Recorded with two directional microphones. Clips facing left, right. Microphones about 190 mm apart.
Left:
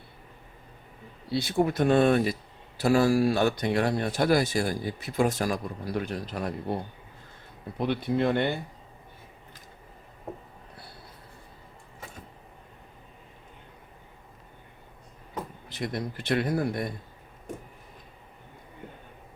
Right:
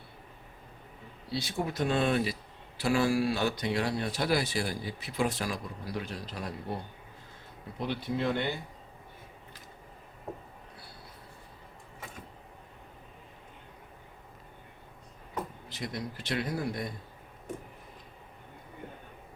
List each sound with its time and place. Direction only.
1.3 s speech: 60° left (ahead or behind)
7.8 s speech: 60° left (ahead or behind)
15.7 s speech: 55° left (ahead or behind)